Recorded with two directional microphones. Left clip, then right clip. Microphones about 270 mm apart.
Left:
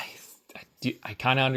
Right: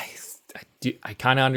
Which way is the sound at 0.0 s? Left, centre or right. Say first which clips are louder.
Right 2 dB; right.